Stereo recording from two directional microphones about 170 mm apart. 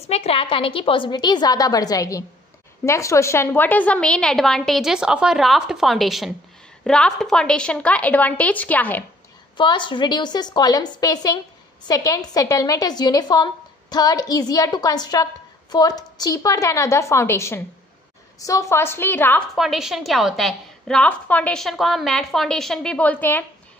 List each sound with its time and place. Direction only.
0.1 s a woman's voice: 35° left (ahead or behind); by 9.0 s 10° left (ahead or behind)
9.6 s a woman's voice: 30° left (ahead or behind); by 19.4 s 10° left (ahead or behind)
19.5 s a woman's voice: centre (ahead or behind)